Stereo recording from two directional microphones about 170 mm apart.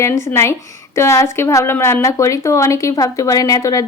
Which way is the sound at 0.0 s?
15° left (ahead or behind).